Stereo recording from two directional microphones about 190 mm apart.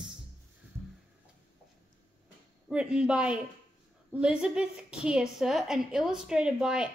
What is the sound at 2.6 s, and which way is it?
A woman's voice, 5° right (ahead or behind).